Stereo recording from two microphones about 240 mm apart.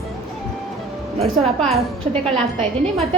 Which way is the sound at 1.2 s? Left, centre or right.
Right.